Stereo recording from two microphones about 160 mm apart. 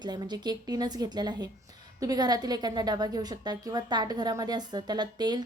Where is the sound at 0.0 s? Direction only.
25° right (ahead or behind).